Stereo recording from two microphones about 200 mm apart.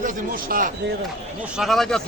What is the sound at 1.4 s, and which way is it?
Speech, centre (ahead or behind).